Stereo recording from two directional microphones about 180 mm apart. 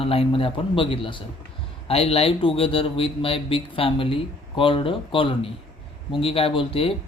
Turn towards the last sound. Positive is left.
turn(degrees=30)  # may be behind; listen again after turning